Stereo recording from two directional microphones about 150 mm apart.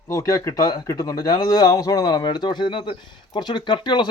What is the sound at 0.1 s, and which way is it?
Speech, 20° left (ahead or behind).